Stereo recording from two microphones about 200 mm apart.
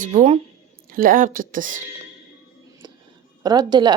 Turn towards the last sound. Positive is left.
turn(degrees=-20)  # may be behind; listen again after turning